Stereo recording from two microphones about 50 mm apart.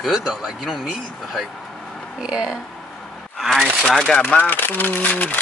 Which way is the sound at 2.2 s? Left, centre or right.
Centre.